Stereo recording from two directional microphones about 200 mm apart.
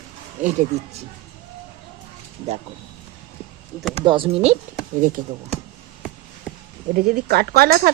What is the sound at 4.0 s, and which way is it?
Speech, 25° right (ahead or behind).